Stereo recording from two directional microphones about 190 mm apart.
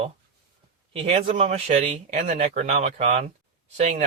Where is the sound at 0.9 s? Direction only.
30° right (ahead or behind).